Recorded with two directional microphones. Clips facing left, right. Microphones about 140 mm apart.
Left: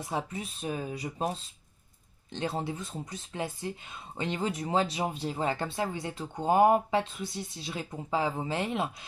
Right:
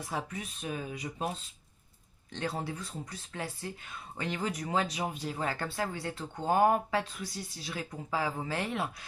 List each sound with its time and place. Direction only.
0.1 s speech: 25° left (ahead or behind)
2.3 s speech: 25° left (ahead or behind)